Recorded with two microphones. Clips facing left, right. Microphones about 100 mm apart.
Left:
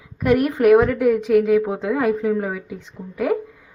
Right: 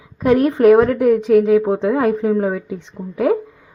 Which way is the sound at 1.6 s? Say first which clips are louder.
Right 4 dB; 40° right (ahead or behind).